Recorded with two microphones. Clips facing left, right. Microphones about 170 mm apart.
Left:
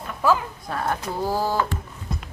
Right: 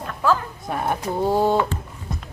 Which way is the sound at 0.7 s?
15° right (ahead or behind).